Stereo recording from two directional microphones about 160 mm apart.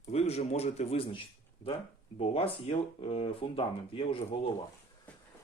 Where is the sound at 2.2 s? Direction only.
35° left (ahead or behind).